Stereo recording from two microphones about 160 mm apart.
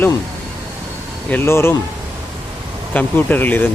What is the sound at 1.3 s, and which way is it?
Speech, 15° left (ahead or behind).